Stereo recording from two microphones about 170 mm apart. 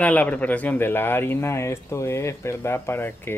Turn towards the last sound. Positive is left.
turn(degrees=10)  # may be behind; listen again after turning